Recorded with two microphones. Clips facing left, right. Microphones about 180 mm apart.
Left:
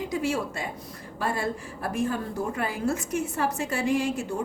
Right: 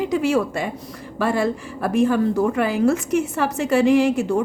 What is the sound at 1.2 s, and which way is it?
A woman's voice, 90° right.